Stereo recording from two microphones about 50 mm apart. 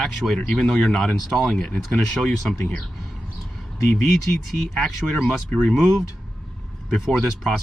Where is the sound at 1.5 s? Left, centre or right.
Centre.